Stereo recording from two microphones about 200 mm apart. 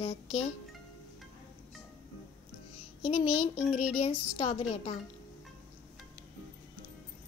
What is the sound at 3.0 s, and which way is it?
A child's voice, 30° left (ahead or behind).